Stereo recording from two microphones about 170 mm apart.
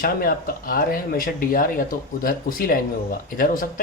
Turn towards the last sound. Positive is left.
turn(degrees=55)  # may be behind; listen again after turning